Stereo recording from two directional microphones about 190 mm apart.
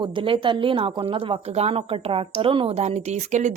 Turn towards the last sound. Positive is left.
turn(degrees=-40)  # may be behind; listen again after turning